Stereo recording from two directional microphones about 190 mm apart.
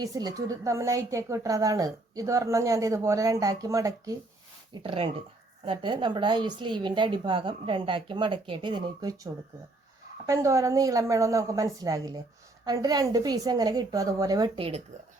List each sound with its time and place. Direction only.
0.0 s a woman's voice: 20° right (ahead or behind)